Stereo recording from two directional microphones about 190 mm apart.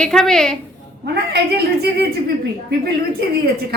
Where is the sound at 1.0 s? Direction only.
60° right (ahead or behind).